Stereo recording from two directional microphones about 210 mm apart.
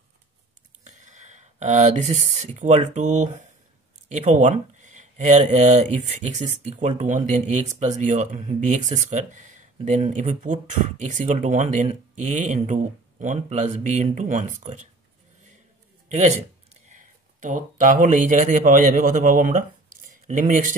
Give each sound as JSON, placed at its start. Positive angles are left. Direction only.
{"t": 0.9, "sound": "speech", "side_deg": -35}
{"t": 16.1, "sound": "a man's voice", "side_deg": -30}